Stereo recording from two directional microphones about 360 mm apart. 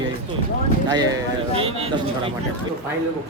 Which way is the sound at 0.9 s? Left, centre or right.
Centre.